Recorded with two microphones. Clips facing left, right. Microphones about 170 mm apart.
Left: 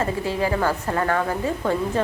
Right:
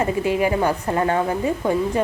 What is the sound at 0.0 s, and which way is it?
A woman's voice, 15° right (ahead or behind).